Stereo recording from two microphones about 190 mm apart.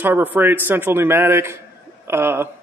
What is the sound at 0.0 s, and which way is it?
A man's voice, 10° right (ahead or behind).